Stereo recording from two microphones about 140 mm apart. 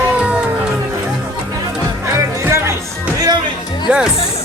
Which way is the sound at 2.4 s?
20° right (ahead or behind).